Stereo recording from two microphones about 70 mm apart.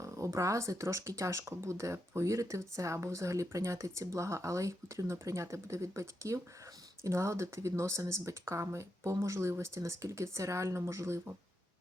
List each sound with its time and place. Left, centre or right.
0.0 s speech: right